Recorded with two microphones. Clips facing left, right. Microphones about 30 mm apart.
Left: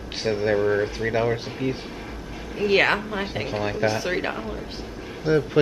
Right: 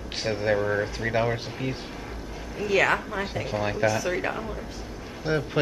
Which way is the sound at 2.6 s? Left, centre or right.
Left.